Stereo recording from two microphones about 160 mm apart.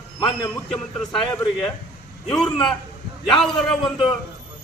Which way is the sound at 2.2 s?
Centre (ahead or behind).